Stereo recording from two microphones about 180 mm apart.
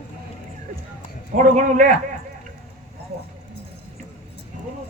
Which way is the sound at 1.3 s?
40° right (ahead or behind).